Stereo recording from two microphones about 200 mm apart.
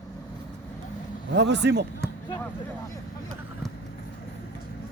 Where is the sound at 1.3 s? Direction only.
60° right (ahead or behind).